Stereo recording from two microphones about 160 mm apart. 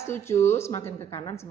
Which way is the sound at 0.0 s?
15° left (ahead or behind).